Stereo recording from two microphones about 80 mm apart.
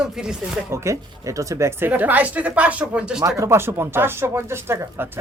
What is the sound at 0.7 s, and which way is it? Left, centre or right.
Speech, right.